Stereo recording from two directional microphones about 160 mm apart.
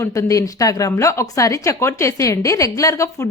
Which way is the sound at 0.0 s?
20° left (ahead or behind).